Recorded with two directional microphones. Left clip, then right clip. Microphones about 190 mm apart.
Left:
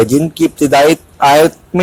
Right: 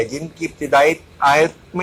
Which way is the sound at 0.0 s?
50° left (ahead or behind).